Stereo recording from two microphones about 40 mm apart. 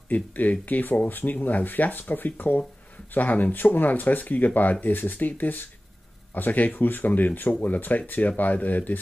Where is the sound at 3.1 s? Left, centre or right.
Left.